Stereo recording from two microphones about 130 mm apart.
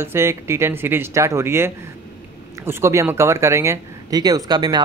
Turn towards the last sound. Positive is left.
turn(degrees=-30)  # may be behind; listen again after turning